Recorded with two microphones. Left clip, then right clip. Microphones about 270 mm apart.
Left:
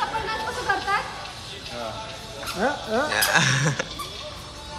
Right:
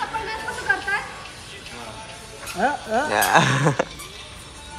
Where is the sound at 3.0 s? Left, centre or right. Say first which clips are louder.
Right 4 dB; centre.